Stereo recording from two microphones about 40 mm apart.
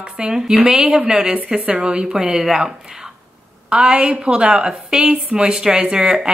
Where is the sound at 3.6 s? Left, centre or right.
Right.